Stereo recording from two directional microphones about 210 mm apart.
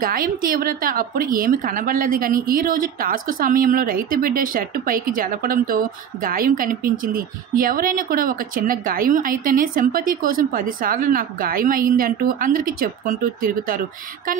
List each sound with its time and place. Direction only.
0.0 s a woman's voice: 45° right (ahead or behind)